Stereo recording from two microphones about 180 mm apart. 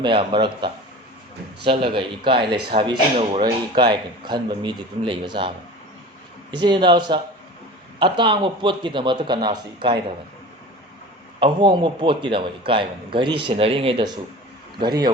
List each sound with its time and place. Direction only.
0.0 s speech: 25° right (ahead or behind)
11.3 s speech: 30° right (ahead or behind)